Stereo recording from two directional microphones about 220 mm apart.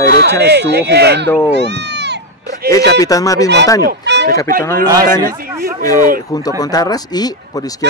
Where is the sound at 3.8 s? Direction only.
50° right (ahead or behind).